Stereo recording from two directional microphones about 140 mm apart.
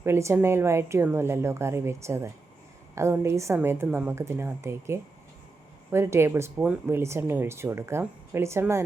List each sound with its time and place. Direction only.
0.0 s speech: 20° right (ahead or behind)